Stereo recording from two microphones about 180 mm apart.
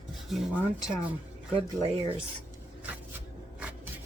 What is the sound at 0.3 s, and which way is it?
Mechanisms, 5° right (ahead or behind).